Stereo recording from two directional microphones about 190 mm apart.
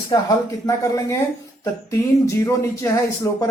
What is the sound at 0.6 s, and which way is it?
Speech, 15° left (ahead or behind).